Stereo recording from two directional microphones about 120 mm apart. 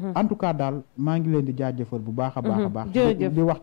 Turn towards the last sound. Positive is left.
turn(degrees=15)  # may be behind; listen again after turning